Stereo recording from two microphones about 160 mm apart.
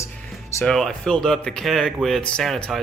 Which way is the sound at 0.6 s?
5° left (ahead or behind).